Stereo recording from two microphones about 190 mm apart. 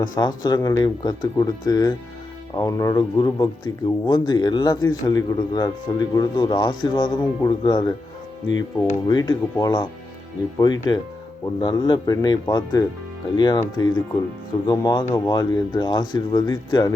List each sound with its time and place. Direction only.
0.0 s speech: 20° left (ahead or behind)